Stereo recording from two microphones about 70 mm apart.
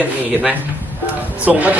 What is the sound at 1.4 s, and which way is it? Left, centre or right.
Speech, right.